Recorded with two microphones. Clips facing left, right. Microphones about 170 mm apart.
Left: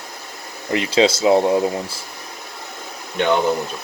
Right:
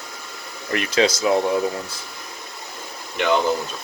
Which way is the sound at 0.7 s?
25° left (ahead or behind).